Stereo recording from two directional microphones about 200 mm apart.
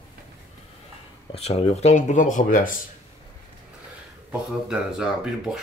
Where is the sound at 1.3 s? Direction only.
30° left (ahead or behind).